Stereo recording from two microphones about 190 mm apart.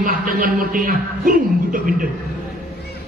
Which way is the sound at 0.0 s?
45° right (ahead or behind).